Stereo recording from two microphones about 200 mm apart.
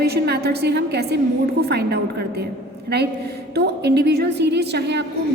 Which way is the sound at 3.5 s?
55° right (ahead or behind).